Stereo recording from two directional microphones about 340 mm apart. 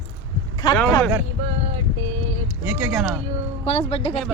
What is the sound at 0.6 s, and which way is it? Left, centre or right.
Speech, centre.